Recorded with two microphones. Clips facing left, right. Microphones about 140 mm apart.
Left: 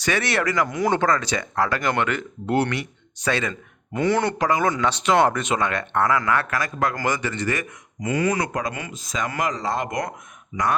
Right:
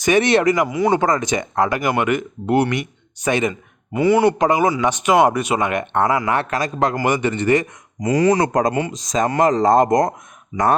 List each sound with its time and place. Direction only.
0.0 s speech: 20° right (ahead or behind)
0.7 s speech: 5° right (ahead or behind)
1.0 s speech: 15° right (ahead or behind); by 9.6 s 35° right (ahead or behind)
9.6 s speech: 45° right (ahead or behind)